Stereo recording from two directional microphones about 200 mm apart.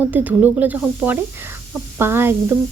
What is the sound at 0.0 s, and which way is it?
Speech, 10° right (ahead or behind).